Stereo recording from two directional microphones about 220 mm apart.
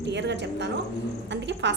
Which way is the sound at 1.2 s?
55° right (ahead or behind).